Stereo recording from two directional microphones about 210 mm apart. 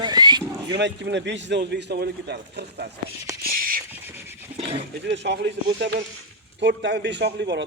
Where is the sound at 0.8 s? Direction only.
55° right (ahead or behind).